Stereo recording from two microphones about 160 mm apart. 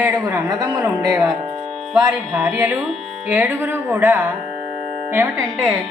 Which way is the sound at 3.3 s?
10° right (ahead or behind).